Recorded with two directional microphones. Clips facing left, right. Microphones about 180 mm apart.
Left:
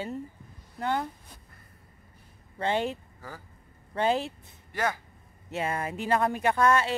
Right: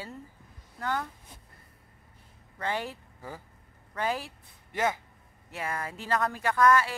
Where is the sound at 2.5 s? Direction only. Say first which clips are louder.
Left 5 dB; 25° left (ahead or behind).